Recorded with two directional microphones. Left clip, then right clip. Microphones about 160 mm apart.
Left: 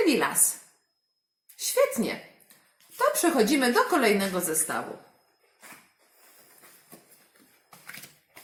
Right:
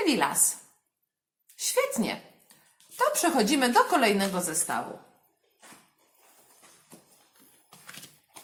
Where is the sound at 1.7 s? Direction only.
40° right (ahead or behind).